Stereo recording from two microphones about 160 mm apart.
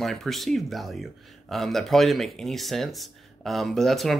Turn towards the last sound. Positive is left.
turn(degrees=0)  # may be behind; listen again after turning